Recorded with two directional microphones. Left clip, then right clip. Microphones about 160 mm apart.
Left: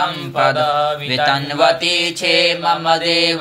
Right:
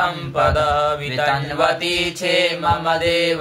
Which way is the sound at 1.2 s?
40° left (ahead or behind).